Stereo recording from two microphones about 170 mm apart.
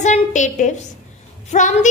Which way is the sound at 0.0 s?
45° left (ahead or behind).